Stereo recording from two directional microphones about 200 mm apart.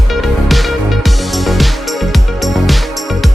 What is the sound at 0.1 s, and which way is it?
Music, centre (ahead or behind).